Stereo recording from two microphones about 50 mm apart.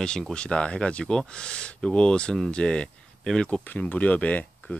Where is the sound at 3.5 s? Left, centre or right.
Left.